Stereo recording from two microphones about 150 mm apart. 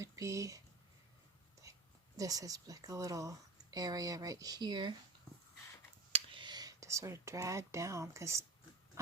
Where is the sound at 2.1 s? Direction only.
25° right (ahead or behind).